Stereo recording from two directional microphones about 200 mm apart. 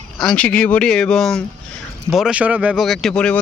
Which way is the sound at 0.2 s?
5° left (ahead or behind).